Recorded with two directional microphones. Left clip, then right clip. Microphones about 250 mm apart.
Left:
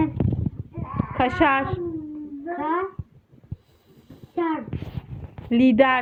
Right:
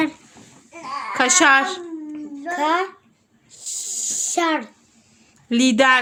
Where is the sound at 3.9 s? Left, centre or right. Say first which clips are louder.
Right 7 dB; right.